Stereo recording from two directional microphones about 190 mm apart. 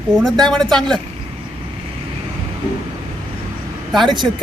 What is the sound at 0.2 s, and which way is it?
Speech, centre (ahead or behind).